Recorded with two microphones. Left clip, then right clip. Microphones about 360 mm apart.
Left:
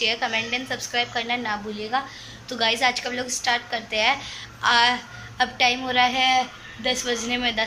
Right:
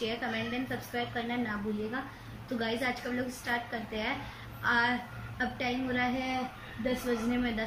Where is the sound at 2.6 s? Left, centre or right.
Left.